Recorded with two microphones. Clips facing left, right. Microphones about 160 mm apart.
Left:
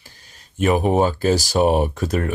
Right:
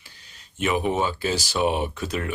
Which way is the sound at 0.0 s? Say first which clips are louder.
Left 3 dB; 45° left (ahead or behind).